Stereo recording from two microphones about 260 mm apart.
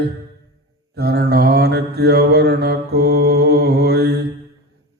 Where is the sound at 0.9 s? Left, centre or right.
Right.